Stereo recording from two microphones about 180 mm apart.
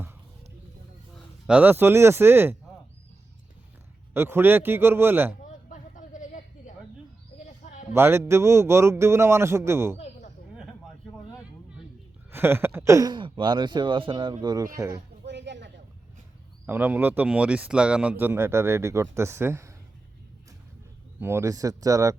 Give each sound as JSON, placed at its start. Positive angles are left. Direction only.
{"t": 1.1, "sound": "speech", "side_deg": -5}
{"t": 4.1, "sound": "speech", "side_deg": -10}
{"t": 5.4, "sound": "a sound", "side_deg": 45}
{"t": 7.9, "sound": "speech", "side_deg": -10}
{"t": 10.5, "sound": "a sound", "side_deg": -5}
{"t": 12.3, "sound": "speech", "side_deg": -10}
{"t": 15.3, "sound": "a sound", "side_deg": -75}
{"t": 16.6, "sound": "speech", "side_deg": -10}
{"t": 21.2, "sound": "speech", "side_deg": -15}